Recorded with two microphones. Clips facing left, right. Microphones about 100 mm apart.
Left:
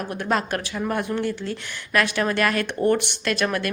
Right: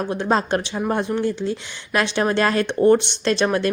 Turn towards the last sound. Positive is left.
turn(degrees=-25)  # may be behind; listen again after turning